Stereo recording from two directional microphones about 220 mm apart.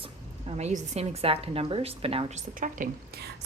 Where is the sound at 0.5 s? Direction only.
30° right (ahead or behind).